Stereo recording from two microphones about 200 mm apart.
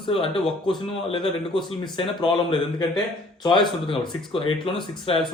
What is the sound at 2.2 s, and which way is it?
Speech, 25° left (ahead or behind).